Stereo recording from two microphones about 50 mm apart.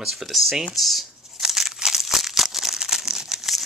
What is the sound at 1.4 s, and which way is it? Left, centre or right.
Crumpling, centre.